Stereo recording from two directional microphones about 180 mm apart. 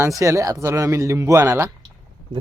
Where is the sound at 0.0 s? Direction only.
15° right (ahead or behind).